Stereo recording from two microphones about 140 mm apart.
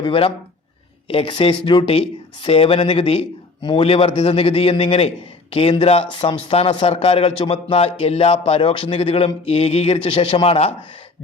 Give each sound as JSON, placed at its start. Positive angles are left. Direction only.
{"t": 0.0, "sound": "speech", "side_deg": 40}